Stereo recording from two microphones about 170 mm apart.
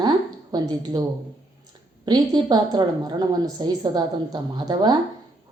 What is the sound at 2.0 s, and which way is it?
A woman's voice, 25° right (ahead or behind).